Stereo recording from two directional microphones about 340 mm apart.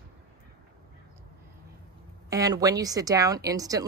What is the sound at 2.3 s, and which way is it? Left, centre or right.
A woman's voice, centre.